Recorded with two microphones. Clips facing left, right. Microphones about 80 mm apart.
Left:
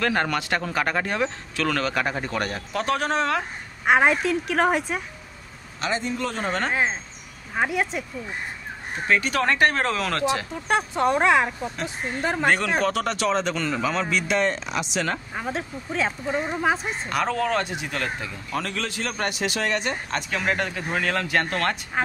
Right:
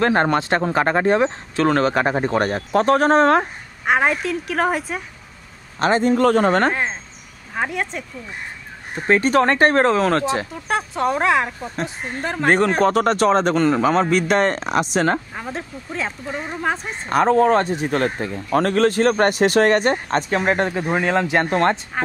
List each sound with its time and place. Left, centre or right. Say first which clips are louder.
0.0 s speech: right 6 dB; right
3.8 s speech: even; centre
5.8 s speech: right 10 dB; right
6.7 s speech: even; centre
9.0 s speech: right 6 dB; right
10.5 s speech: even; centre
12.4 s speech: right 7 dB; right
15.3 s speech: even; centre
17.1 s speech: right 9 dB; right
22.0 s speech: left 4 dB; centre